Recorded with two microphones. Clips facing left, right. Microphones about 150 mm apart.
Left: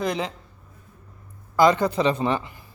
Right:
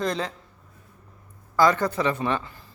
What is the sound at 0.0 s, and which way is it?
Speech, 10° left (ahead or behind).